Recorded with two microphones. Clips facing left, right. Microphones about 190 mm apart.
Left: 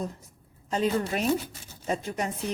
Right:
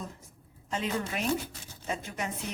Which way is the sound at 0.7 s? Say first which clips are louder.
Left 6 dB; 40° left (ahead or behind).